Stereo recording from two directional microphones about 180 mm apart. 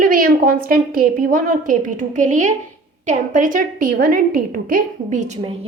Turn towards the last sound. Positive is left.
turn(degrees=-40)  # may be behind; listen again after turning